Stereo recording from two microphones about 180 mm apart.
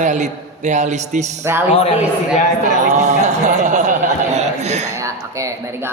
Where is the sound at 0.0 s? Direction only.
40° right (ahead or behind).